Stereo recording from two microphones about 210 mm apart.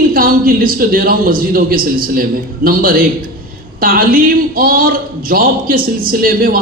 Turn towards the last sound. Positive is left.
turn(degrees=-45)  # may be behind; listen again after turning